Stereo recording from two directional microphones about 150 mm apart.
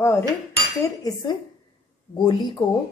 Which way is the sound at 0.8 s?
25° left (ahead or behind).